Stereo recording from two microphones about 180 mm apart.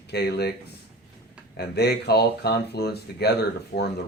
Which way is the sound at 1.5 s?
65° left (ahead or behind).